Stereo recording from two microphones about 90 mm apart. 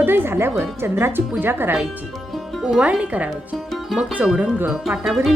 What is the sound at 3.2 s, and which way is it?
Speech, centre (ahead or behind).